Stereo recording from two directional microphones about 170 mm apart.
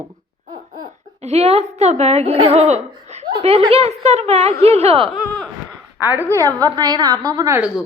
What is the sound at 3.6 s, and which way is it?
Speech, 35° right (ahead or behind).